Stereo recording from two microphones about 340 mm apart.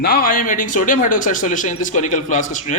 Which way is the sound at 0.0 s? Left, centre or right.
Left.